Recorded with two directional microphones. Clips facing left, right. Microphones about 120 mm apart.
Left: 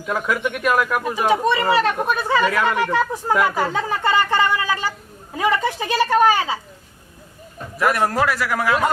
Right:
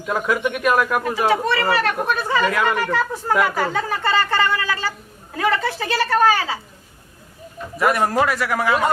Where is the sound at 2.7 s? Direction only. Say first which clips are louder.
Left 2 dB; 15° left (ahead or behind).